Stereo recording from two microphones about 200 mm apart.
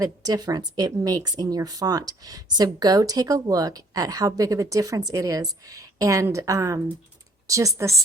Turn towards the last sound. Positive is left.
turn(degrees=-15)  # may be behind; listen again after turning